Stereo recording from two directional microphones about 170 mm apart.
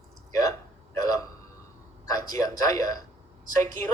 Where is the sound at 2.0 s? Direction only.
20° left (ahead or behind).